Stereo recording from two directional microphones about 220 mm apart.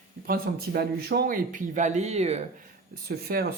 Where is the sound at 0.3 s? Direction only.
40° right (ahead or behind).